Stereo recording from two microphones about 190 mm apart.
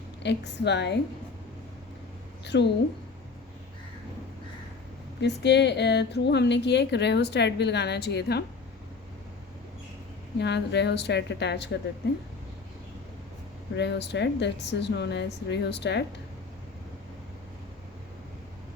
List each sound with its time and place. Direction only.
0.2 s speech: 65° left (ahead or behind)
2.4 s a woman's voice: 65° left (ahead or behind)
5.2 s speech: 65° left (ahead or behind)
10.3 s speech: 65° left (ahead or behind)
13.7 s speech: 65° left (ahead or behind)